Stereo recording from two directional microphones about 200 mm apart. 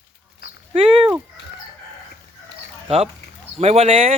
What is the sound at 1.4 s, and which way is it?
Chicken, 60° left (ahead or behind).